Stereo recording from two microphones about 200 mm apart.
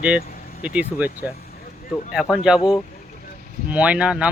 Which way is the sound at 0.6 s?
5° right (ahead or behind).